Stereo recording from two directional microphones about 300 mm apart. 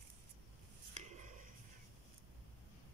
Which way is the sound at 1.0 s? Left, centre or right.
Right.